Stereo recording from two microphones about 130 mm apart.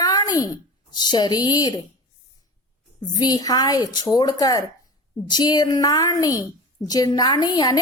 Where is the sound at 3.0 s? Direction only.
30° left (ahead or behind).